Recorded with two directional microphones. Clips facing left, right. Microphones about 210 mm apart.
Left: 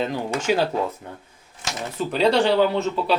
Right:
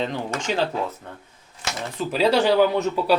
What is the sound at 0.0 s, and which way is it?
Speech, 5° left (ahead or behind).